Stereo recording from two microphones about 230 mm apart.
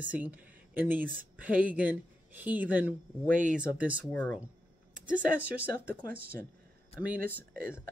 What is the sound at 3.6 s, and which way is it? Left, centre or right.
Speech, centre.